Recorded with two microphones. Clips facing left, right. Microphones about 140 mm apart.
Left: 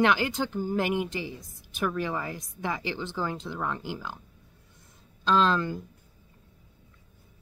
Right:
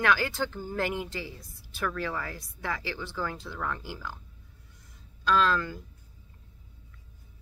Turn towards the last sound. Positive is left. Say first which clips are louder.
# left 2 dB
turn(degrees=20)  # may be behind; listen again after turning